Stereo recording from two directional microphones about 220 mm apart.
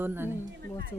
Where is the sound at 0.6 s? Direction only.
45° right (ahead or behind).